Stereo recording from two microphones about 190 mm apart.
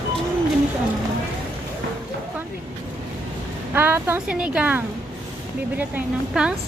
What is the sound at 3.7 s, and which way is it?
A woman's voice, 10° right (ahead or behind).